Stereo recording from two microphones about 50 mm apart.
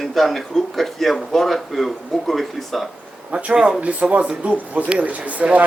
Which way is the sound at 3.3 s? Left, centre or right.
Centre.